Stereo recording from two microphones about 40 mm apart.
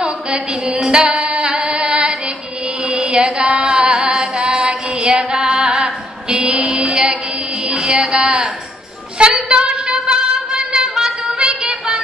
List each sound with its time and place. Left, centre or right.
0.0 s music: right
7.9 s a sound: right
9.2 s music: right